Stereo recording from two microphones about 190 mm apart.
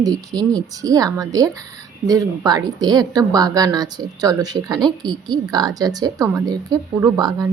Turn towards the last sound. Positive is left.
turn(degrees=-20)  # may be behind; listen again after turning